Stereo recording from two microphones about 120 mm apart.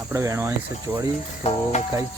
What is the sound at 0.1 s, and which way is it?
Speech, 25° right (ahead or behind).